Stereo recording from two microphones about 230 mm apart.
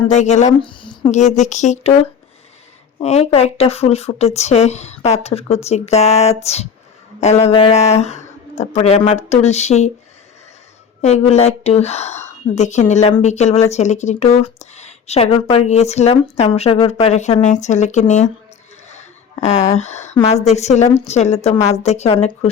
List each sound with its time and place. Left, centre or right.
0.0 s speech: left
3.0 s speech: left
11.0 s a woman's voice: left